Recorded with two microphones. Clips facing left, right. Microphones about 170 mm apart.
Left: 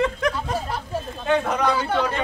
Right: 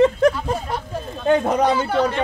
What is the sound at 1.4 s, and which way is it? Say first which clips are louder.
Speech: right 5 dB; 35° right (ahead or behind).